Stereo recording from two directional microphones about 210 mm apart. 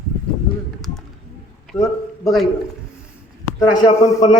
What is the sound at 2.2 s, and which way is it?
Speech, centre (ahead or behind).